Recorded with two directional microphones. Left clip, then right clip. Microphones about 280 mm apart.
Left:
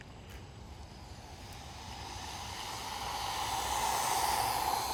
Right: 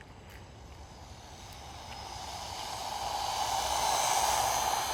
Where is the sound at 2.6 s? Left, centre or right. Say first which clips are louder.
Right 4 dB; right.